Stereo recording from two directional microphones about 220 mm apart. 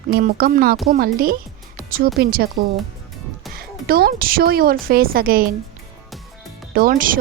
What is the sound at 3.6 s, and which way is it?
Speech, 45° right (ahead or behind).